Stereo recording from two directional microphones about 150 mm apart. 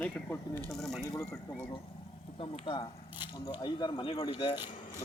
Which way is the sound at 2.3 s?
35° left (ahead or behind).